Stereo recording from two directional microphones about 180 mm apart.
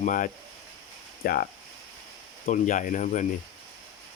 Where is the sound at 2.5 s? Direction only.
50° left (ahead or behind).